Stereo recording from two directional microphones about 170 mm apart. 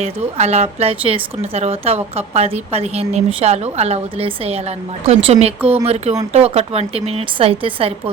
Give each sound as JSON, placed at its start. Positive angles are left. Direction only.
{"t": 0.0, "sound": "a woman's voice", "side_deg": -40}